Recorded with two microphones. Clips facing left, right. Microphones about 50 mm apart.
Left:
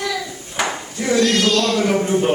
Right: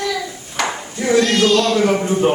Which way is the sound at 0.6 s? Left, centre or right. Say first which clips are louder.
Right 1 dB; centre.